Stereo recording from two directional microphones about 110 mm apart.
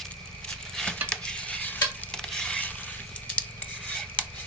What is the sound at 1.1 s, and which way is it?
Stir, 10° left (ahead or behind).